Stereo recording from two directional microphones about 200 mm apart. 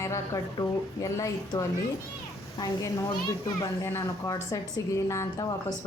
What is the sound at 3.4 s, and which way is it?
A woman's voice, 15° left (ahead or behind).